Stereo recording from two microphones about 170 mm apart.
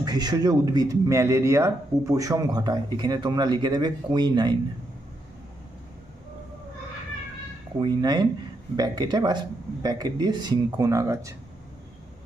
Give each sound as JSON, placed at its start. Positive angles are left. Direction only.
{"t": 0.0, "sound": "speech", "side_deg": -25}
{"t": 7.8, "sound": "speech", "side_deg": -25}